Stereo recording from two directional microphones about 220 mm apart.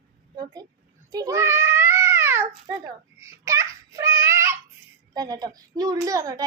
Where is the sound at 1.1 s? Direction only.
15° right (ahead or behind).